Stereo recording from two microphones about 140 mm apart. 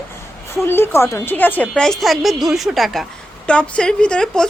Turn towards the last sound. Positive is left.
turn(degrees=5)  # may be behind; listen again after turning